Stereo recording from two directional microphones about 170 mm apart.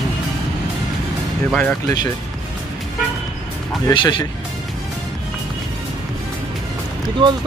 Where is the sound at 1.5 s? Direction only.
10° left (ahead or behind).